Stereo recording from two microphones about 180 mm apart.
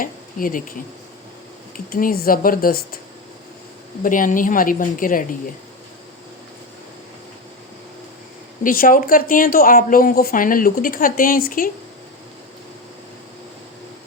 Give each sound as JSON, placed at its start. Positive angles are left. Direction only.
{"t": 0.0, "sound": "speech", "side_deg": 50}
{"t": 1.7, "sound": "speech", "side_deg": 50}
{"t": 4.0, "sound": "speech", "side_deg": 50}
{"t": 8.6, "sound": "speech", "side_deg": 50}